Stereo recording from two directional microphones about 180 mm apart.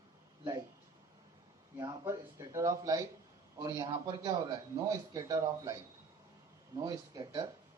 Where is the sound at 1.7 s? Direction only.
20° right (ahead or behind).